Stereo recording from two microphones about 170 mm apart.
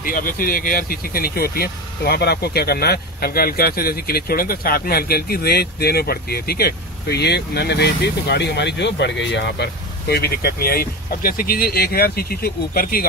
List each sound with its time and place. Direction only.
0.0 s speech: 55° left (ahead or behind)